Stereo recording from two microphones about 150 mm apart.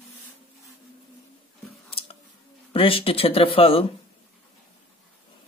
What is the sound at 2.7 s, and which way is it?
Speech, 35° left (ahead or behind).